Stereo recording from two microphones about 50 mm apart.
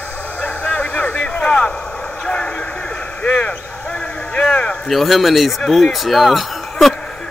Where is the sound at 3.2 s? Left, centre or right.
Left.